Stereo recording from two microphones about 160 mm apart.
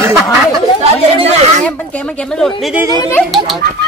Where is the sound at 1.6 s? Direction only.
10° left (ahead or behind).